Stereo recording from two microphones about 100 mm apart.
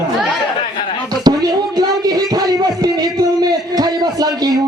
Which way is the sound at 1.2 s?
45° right (ahead or behind).